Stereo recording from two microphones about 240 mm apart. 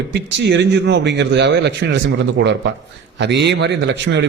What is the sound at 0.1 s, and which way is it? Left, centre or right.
A man's voice, right.